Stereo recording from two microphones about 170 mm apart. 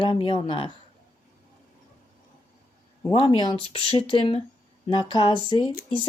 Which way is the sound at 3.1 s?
30° left (ahead or behind).